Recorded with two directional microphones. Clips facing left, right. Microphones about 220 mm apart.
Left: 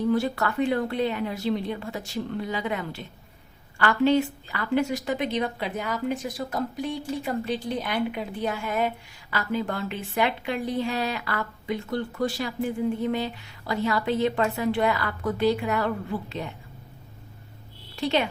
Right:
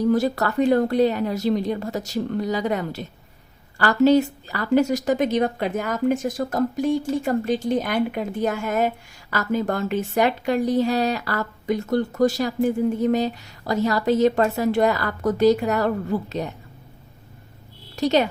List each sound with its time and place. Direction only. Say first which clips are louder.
0.0 s speech: right 4 dB; 40° right (ahead or behind)
17.9 s speech: right 6 dB; 40° right (ahead or behind)